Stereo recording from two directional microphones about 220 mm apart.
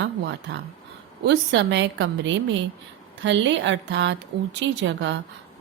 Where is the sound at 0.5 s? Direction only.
55° right (ahead or behind).